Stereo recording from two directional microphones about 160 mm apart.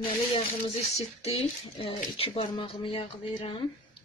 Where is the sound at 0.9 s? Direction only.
40° left (ahead or behind).